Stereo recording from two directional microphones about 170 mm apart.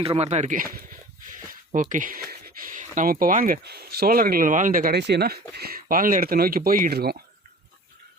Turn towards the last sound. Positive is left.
turn(degrees=-65)  # may be behind; listen again after turning